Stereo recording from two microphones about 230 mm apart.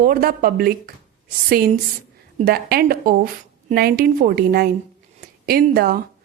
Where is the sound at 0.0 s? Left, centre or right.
Right.